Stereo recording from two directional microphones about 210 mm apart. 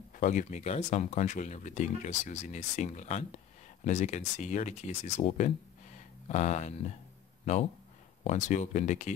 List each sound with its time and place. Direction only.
0.1 s speech: 40° left (ahead or behind)
5.9 s a sound: 30° left (ahead or behind)
7.5 s speech: 30° left (ahead or behind)